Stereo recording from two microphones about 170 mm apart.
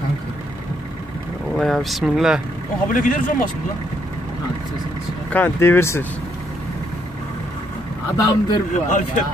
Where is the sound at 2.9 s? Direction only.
50° left (ahead or behind).